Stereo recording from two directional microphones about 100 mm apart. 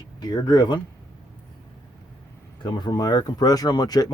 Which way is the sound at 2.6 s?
50° left (ahead or behind).